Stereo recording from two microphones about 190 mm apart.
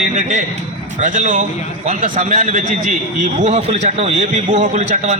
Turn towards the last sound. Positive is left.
turn(degrees=-40)  # may be behind; listen again after turning